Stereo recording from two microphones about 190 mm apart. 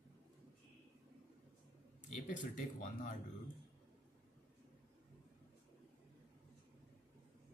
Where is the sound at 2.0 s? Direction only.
40° left (ahead or behind).